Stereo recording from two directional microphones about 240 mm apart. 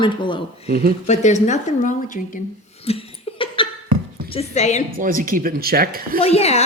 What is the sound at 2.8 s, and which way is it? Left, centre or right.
Laughter, left.